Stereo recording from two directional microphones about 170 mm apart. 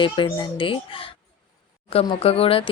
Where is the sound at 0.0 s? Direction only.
30° left (ahead or behind).